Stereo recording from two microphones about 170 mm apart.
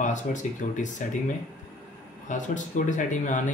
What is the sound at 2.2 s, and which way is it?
Speech, 45° left (ahead or behind).